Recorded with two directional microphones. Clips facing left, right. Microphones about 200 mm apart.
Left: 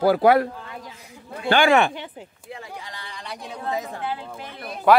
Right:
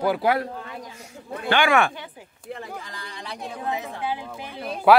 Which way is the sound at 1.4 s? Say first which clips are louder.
Left 3 dB; 35° left (ahead or behind).